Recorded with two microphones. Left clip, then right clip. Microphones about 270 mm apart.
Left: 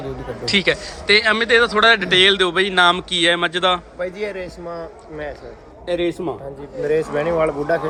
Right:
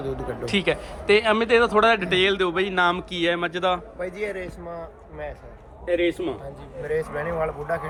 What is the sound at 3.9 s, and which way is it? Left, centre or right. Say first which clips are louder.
Speech: left 4 dB; left.